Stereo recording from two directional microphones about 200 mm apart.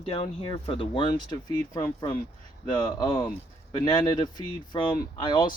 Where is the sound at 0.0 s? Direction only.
30° left (ahead or behind).